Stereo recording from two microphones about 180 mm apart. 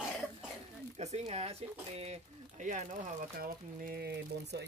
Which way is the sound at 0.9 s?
35° right (ahead or behind).